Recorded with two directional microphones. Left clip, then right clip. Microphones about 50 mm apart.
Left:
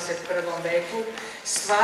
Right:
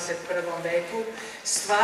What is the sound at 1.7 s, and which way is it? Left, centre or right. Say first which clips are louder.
Speech: left 1 dB; right.